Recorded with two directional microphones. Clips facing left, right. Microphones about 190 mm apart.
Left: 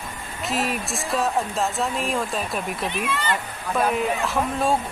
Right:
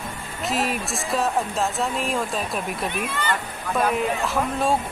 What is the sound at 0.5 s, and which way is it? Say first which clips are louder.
Speech: right 1 dB; centre (ahead or behind).